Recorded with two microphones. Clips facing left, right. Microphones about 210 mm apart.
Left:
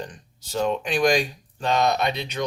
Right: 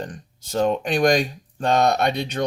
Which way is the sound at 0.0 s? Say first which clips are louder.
Right 3 dB; 50° right (ahead or behind).